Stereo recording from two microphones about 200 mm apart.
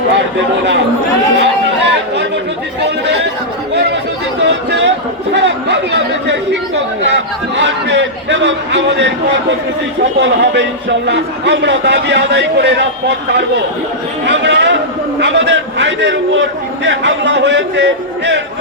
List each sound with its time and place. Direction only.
1.4 s chatter: 60° right (ahead or behind)
4.4 s a sound: 60° right (ahead or behind)
5.3 s a man's voice: 60° right (ahead or behind)